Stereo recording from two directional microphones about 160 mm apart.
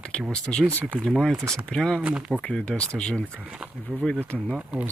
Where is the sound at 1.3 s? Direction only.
20° right (ahead or behind).